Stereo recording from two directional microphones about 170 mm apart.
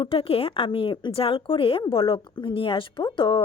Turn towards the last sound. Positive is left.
turn(degrees=30)  # may be behind; listen again after turning